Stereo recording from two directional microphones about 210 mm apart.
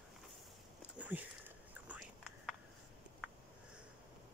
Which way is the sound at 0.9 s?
5° right (ahead or behind).